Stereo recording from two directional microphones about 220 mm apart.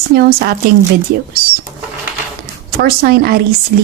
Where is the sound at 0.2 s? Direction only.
45° right (ahead or behind).